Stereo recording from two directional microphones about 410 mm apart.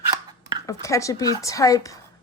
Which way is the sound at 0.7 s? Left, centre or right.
Centre.